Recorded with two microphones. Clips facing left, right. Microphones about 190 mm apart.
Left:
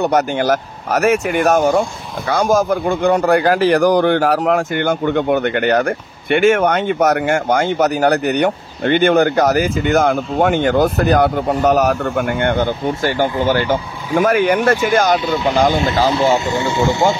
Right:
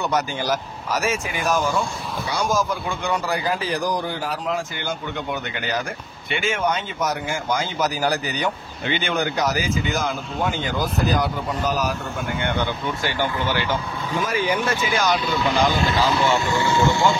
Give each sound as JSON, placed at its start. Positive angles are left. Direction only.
{"t": 0.0, "sound": "speech", "side_deg": 60}
{"t": 1.8, "sound": "speech", "side_deg": 50}
{"t": 14.1, "sound": "speech", "side_deg": 60}
{"t": 16.3, "sound": "speech", "side_deg": 20}